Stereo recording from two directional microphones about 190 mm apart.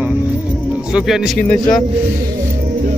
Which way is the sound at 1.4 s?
5° left (ahead or behind).